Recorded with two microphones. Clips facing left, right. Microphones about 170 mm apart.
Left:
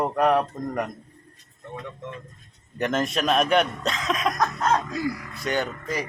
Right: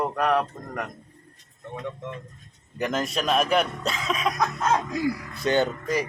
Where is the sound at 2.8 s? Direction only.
Centre (ahead or behind).